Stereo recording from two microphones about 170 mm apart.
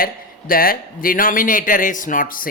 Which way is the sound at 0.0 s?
60° left (ahead or behind).